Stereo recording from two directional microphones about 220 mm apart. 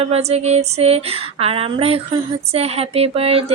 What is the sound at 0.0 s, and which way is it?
Female singing, 30° right (ahead or behind).